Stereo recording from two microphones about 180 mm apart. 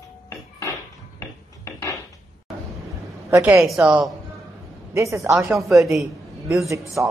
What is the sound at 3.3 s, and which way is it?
Speech, 15° right (ahead or behind).